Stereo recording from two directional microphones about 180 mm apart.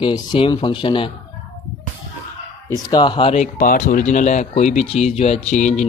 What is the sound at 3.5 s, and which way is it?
Speech, 50° left (ahead or behind).